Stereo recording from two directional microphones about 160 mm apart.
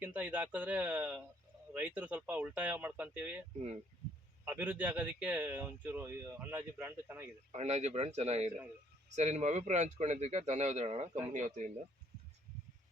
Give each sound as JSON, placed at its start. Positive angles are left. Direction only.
{"t": 0.0, "sound": "speech", "side_deg": -10}
{"t": 4.4, "sound": "speech", "side_deg": -10}
{"t": 7.5, "sound": "speech", "side_deg": -45}
{"t": 11.3, "sound": "speech", "side_deg": -50}